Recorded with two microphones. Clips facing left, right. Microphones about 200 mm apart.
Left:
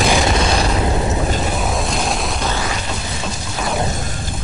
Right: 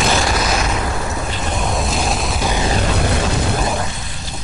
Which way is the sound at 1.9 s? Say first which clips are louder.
Even; centre (ahead or behind).